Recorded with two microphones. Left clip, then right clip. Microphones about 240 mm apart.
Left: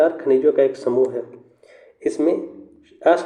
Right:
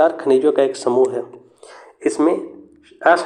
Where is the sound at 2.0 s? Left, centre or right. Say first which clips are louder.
Right 3 dB; centre.